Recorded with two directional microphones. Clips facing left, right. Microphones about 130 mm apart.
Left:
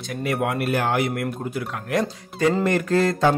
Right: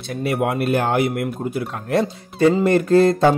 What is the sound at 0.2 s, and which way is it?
Speech, 25° right (ahead or behind).